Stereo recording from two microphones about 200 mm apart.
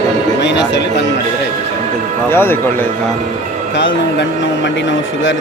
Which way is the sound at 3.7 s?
65° left (ahead or behind).